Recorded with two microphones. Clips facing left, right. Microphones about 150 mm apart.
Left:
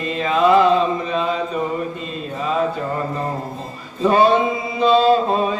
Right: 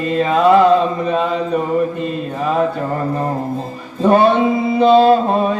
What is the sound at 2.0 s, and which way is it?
Mantra, 55° right (ahead or behind).